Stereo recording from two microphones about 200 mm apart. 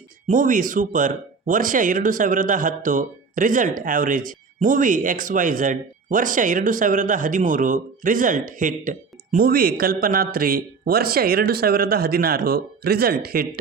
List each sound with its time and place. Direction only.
0.3 s speech: 40° right (ahead or behind)